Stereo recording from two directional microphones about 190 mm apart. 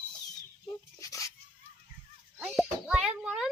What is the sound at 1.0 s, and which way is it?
Dog, 15° left (ahead or behind).